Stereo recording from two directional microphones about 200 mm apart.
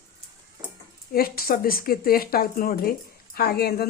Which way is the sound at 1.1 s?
50° left (ahead or behind).